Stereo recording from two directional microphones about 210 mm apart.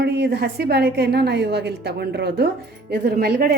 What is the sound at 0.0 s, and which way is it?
A woman's voice, 50° right (ahead or behind).